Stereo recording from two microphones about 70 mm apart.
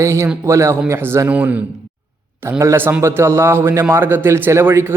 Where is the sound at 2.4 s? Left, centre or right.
Right.